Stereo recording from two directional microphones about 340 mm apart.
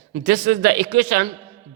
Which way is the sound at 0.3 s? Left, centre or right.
Right.